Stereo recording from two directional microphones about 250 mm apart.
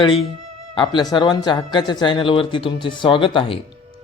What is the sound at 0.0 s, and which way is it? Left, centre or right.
Speech, left.